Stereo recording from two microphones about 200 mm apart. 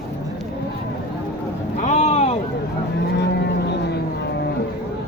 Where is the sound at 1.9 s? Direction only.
35° left (ahead or behind).